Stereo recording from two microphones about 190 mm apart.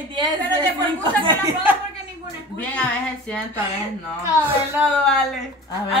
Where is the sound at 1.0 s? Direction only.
25° right (ahead or behind).